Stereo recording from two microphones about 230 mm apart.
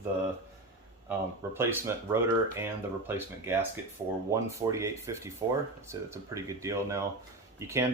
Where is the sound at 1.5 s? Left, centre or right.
Centre.